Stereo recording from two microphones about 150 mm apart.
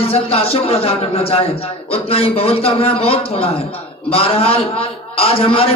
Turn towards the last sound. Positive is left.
turn(degrees=40)  # may be behind; listen again after turning